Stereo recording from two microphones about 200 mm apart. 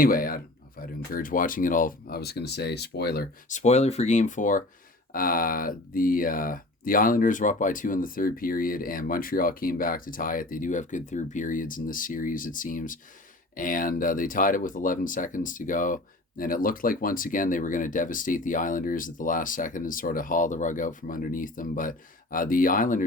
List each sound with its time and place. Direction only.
0.0 s speech: 45° left (ahead or behind)
3.6 s speech: 35° left (ahead or behind)